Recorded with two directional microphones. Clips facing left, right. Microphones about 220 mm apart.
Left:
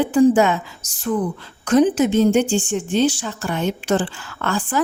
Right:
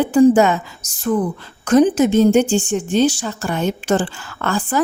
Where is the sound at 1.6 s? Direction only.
45° right (ahead or behind).